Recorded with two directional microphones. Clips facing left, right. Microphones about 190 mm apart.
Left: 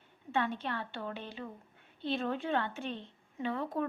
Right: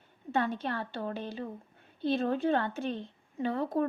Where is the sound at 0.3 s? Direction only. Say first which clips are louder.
Right 3 dB; 40° right (ahead or behind).